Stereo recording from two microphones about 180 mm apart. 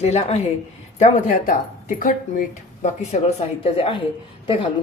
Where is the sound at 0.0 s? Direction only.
35° left (ahead or behind).